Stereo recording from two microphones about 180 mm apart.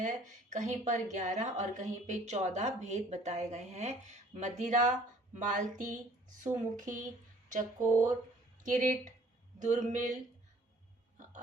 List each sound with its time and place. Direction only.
0.0 s a woman's voice: 45° right (ahead or behind)
8.6 s a woman's voice: 45° right (ahead or behind)